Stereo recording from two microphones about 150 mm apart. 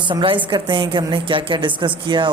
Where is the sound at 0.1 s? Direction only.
30° right (ahead or behind).